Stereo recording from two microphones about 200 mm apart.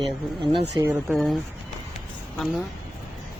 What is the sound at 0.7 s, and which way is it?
Speech, 15° right (ahead or behind).